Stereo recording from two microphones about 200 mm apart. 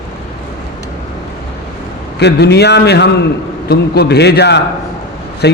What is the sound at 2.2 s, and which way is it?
A man's voice, 55° left (ahead or behind).